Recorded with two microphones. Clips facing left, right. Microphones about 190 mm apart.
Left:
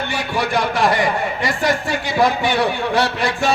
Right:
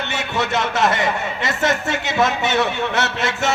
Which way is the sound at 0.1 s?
25° right (ahead or behind).